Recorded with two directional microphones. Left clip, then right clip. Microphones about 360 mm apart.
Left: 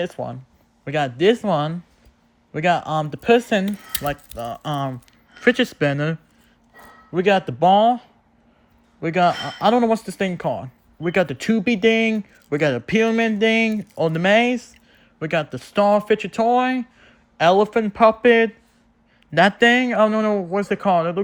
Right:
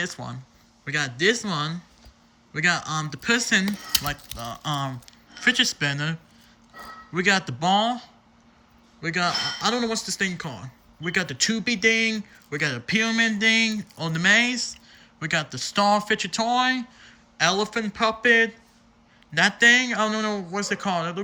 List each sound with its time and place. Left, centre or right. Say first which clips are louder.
0.0 s speech: left 5 dB; centre